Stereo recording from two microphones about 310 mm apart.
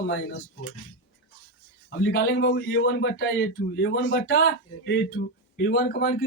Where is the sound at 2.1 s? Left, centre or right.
Left.